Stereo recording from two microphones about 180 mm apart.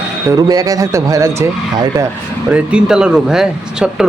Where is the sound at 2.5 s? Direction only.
5° right (ahead or behind).